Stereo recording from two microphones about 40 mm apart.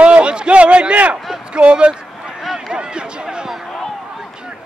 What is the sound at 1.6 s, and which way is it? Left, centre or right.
Speech, right.